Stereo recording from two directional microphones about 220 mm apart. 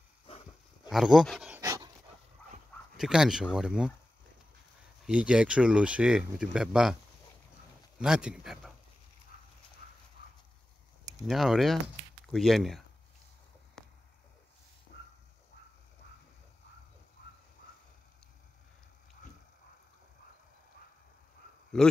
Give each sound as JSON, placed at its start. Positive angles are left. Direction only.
{"t": 0.8, "sound": "dog", "side_deg": 0}
{"t": 3.0, "sound": "speech", "side_deg": -5}
{"t": 5.0, "sound": "speech", "side_deg": -5}
{"t": 8.0, "sound": "speech", "side_deg": -5}
{"t": 11.2, "sound": "speech", "side_deg": 0}
{"t": 13.8, "sound": "a sound", "side_deg": 5}
{"t": 14.9, "sound": "dog", "side_deg": 50}